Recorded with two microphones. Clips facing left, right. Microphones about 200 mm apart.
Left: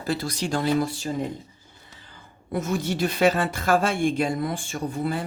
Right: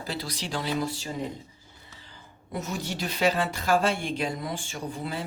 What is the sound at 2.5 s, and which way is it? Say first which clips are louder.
Speech: left 7 dB; 50° left (ahead or behind).